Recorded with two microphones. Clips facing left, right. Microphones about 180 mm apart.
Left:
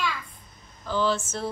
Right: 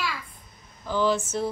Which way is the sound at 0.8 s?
15° right (ahead or behind).